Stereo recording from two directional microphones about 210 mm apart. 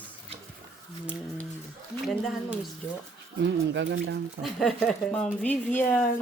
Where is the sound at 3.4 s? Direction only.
55° right (ahead or behind).